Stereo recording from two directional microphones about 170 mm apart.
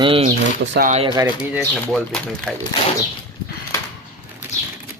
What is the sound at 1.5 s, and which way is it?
Speech, centre (ahead or behind).